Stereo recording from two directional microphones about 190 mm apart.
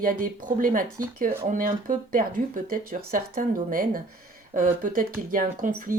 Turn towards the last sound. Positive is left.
turn(degrees=-45)  # may be behind; listen again after turning